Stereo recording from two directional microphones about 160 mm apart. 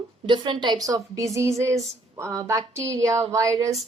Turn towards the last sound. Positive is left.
turn(degrees=-20)  # may be behind; listen again after turning